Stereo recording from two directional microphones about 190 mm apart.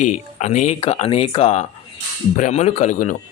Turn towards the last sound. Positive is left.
turn(degrees=45)  # may be behind; listen again after turning